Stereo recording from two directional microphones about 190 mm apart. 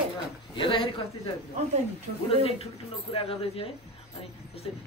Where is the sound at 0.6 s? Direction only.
25° left (ahead or behind).